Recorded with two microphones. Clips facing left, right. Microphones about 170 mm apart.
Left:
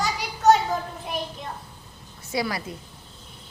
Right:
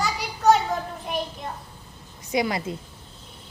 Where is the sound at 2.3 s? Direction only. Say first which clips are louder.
Right 3 dB; 20° right (ahead or behind).